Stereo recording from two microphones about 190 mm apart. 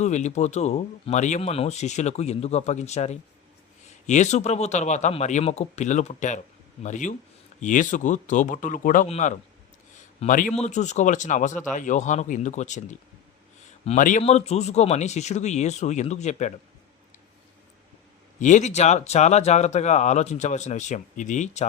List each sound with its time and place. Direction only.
0.0 s speech: 40° left (ahead or behind)
18.3 s speech: 40° left (ahead or behind)